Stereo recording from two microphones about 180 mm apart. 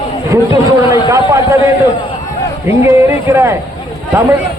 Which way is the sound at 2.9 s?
15° right (ahead or behind).